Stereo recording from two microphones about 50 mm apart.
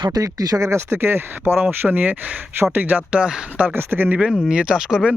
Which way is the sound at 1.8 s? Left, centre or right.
Right.